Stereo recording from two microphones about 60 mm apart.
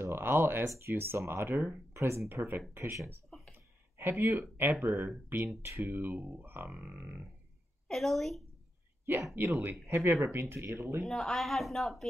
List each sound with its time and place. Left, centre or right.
0.0 s speech: right
2.0 s speech: right
3.5 s a sound: right
4.2 s speech: right
6.1 s a sound: right
6.4 s speech: right
7.0 s a sound: right
7.9 s speech: centre
9.6 s speech: right
11.0 s speech: centre